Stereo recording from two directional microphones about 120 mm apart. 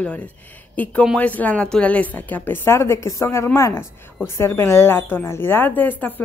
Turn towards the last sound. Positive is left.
turn(degrees=15)  # may be behind; listen again after turning